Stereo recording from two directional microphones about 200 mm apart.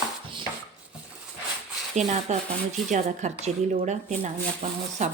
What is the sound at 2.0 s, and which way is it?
A woman's voice, 35° right (ahead or behind).